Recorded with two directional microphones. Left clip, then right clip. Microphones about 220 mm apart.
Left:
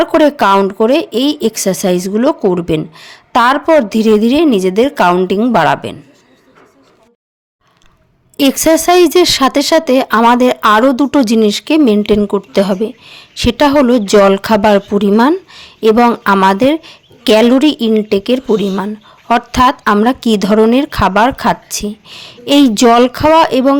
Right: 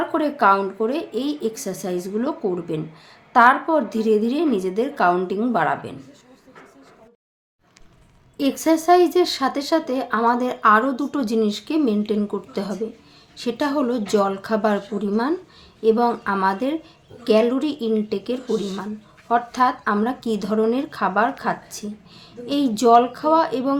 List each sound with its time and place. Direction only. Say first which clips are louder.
0.0 s speech: left 9 dB; 45° left (ahead or behind)
8.4 s speech: left 10 dB; 45° left (ahead or behind)